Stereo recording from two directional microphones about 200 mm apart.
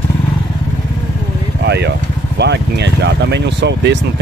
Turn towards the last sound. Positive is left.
turn(degrees=-60)  # may be behind; listen again after turning